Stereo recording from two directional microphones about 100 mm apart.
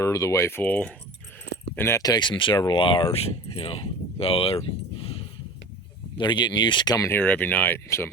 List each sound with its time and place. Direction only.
0.0 s speech: 30° left (ahead or behind)
2.0 s speech: 40° left (ahead or behind); by 5.2 s 70° left (ahead or behind)
6.1 s speech: 50° left (ahead or behind)
7.1 s speech: 20° left (ahead or behind)